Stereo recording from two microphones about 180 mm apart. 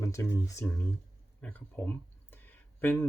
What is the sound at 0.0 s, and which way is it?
Speech, 15° left (ahead or behind).